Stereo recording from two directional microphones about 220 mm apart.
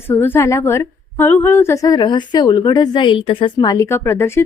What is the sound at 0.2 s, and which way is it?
A woman's voice, 10° left (ahead or behind).